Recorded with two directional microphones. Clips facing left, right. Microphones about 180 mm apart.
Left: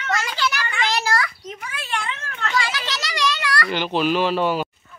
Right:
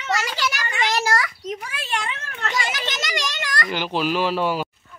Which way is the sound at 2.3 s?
20° right (ahead or behind).